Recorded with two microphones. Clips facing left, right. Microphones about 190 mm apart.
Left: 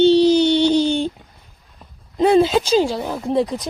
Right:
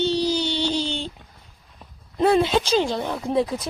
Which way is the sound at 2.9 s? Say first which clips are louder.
Left 3 dB; 5° left (ahead or behind).